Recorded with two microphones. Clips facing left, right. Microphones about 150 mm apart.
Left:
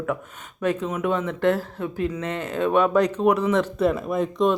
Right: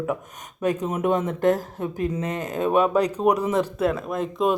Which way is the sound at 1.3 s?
45° right (ahead or behind).